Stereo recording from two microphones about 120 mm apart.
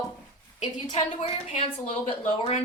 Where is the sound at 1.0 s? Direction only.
65° left (ahead or behind); by 2.5 s 50° left (ahead or behind).